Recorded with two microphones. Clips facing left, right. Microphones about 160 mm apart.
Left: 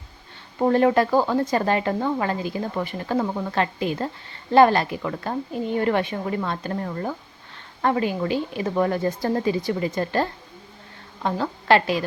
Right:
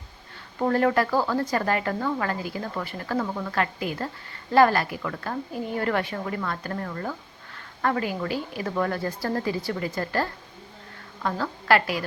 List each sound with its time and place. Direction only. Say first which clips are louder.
0.6 s speech: left 4 dB; 20° left (ahead or behind)